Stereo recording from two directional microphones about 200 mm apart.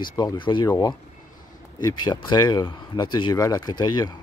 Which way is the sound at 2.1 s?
20° left (ahead or behind).